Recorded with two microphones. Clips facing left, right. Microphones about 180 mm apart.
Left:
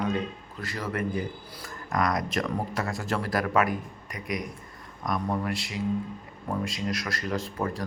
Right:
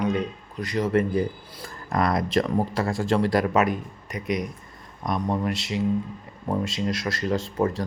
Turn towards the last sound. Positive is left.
turn(degrees=-25)  # may be behind; listen again after turning